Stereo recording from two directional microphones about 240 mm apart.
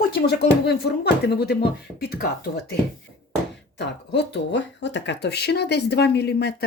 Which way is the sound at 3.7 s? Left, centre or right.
Left.